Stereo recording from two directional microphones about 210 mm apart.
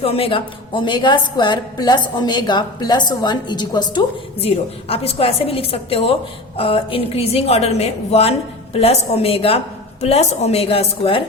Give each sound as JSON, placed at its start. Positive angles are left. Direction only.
{"t": 0.0, "sound": "a woman's voice", "side_deg": 25}